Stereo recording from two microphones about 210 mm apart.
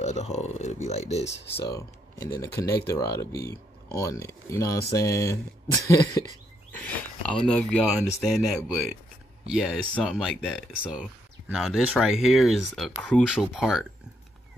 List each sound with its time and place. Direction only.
0.0 s speech: 30° left (ahead or behind)
1.7 s speech: 15° left (ahead or behind); by 13.8 s 5° right (ahead or behind)